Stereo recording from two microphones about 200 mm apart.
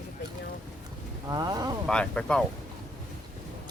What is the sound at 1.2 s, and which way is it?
Speech, 20° right (ahead or behind).